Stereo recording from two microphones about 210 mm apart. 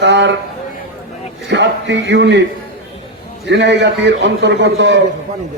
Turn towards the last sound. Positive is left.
turn(degrees=-55)  # may be behind; listen again after turning